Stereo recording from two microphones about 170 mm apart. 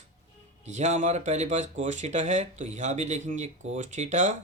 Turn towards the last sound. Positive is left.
turn(degrees=-45)  # may be behind; listen again after turning